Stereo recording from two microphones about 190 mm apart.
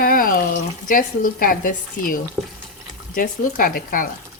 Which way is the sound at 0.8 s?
45° left (ahead or behind).